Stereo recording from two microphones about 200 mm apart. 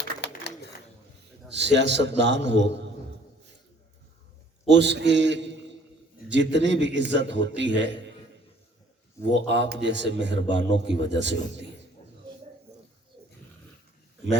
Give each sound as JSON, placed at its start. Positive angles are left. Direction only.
{"t": 0.2, "sound": "a sound", "side_deg": 60}
{"t": 1.5, "sound": "a man's voice", "side_deg": -60}
{"t": 4.7, "sound": "a man's voice", "side_deg": -60}
{"t": 9.5, "sound": "a man's voice", "side_deg": -60}